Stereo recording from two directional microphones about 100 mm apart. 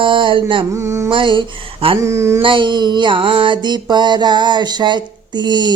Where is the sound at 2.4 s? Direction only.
55° right (ahead or behind).